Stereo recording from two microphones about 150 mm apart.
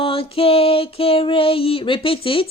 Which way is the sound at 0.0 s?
40° left (ahead or behind).